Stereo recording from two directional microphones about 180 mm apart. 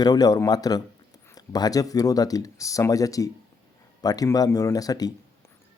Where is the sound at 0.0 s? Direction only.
20° left (ahead or behind).